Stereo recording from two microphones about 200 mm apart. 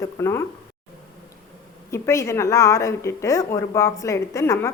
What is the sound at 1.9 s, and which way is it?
Speech, 15° left (ahead or behind).